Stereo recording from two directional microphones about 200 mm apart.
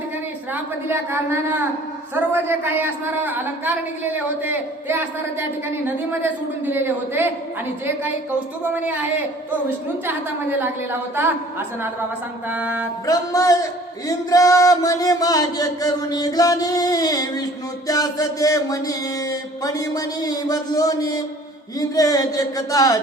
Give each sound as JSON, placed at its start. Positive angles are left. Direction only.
{"t": 0.9, "sound": "a woman's voice", "side_deg": -10}
{"t": 6.7, "sound": "a woman's voice", "side_deg": -10}
{"t": 8.6, "sound": "a woman's voice", "side_deg": -10}
{"t": 10.1, "sound": "a woman's voice", "side_deg": -10}
{"t": 12.5, "sound": "a woman's voice", "side_deg": -10}
{"t": 13.1, "sound": "music", "side_deg": 15}